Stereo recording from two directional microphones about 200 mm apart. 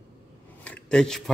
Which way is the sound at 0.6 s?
5° left (ahead or behind).